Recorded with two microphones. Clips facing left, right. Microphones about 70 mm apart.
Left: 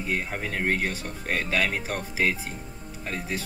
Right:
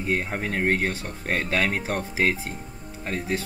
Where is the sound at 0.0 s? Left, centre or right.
Right.